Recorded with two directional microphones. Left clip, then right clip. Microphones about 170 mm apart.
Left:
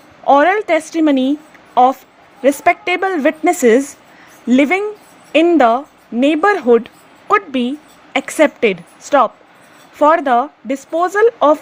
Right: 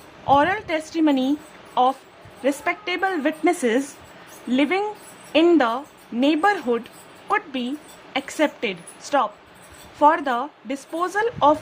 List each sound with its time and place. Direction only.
0.3 s a woman's voice: 30° left (ahead or behind)